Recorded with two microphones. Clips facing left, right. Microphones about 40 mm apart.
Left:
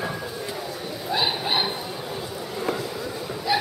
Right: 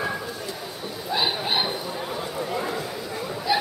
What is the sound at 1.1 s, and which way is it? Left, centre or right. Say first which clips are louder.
Chuckle: even; centre.